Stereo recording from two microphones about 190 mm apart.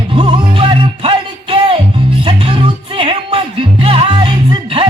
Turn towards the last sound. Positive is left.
turn(degrees=-25)  # may be behind; listen again after turning